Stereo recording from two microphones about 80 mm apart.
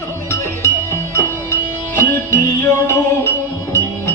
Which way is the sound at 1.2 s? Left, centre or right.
Left.